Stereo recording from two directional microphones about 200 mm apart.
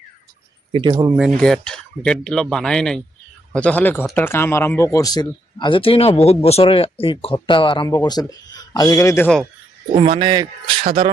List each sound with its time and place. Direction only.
0.7 s a man's voice: 25° right (ahead or behind)
1.4 s speech: 5° left (ahead or behind)
10.0 s a man's voice: 25° right (ahead or behind)